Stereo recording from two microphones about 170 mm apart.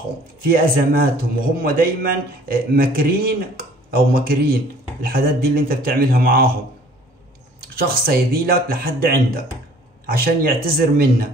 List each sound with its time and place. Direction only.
0.5 s a man's voice: 60° right (ahead or behind)
7.6 s a man's voice: 60° right (ahead or behind)